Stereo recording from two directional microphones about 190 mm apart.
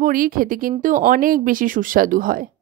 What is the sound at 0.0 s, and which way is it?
Speech, 45° right (ahead or behind).